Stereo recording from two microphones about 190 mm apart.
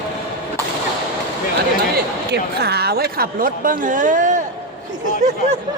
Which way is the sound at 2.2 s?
55° right (ahead or behind).